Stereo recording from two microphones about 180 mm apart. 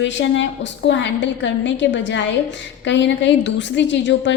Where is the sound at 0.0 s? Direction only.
90° left.